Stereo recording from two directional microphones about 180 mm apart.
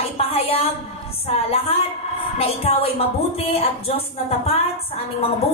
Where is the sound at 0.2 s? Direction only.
35° left (ahead or behind).